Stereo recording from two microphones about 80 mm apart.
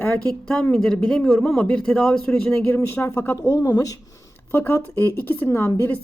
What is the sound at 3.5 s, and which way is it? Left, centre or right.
Speech, left.